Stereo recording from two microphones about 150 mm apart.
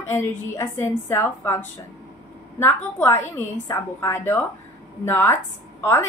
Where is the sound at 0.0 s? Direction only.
15° left (ahead or behind).